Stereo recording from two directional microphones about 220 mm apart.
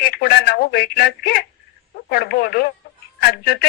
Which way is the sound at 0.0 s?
45° left (ahead or behind).